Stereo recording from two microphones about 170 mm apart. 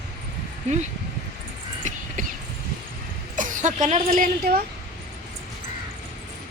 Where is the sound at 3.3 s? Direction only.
50° right (ahead or behind).